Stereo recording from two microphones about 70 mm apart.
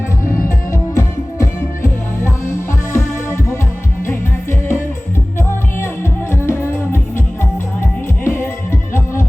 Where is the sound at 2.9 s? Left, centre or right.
Left.